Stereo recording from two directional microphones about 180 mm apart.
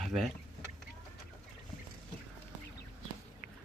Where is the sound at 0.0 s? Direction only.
Centre (ahead or behind).